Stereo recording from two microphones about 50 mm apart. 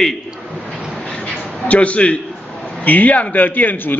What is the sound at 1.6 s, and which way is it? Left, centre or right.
A man's voice, left.